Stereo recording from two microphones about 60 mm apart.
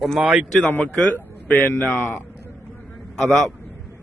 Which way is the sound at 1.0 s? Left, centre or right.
Left.